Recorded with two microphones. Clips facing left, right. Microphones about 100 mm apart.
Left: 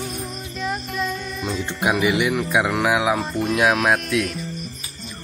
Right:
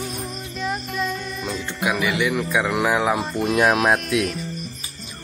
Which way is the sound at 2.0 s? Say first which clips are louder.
Left 2 dB; 20° left (ahead or behind).